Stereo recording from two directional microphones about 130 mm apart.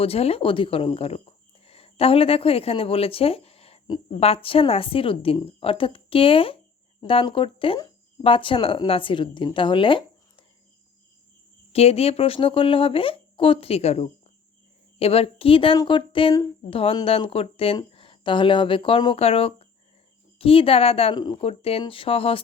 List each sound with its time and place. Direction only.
0.0 s speech: 50° left (ahead or behind)
11.7 s speech: 50° left (ahead or behind)